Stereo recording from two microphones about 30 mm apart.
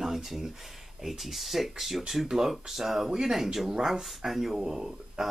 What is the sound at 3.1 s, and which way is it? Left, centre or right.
Speech, right.